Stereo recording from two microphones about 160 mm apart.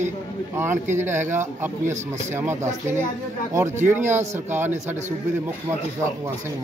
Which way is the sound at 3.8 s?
15° right (ahead or behind).